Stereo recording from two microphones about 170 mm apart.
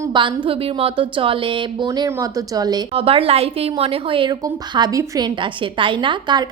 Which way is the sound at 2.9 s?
35° right (ahead or behind).